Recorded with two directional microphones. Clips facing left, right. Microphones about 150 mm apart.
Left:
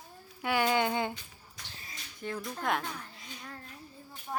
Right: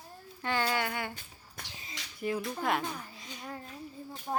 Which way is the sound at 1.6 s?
55° right (ahead or behind).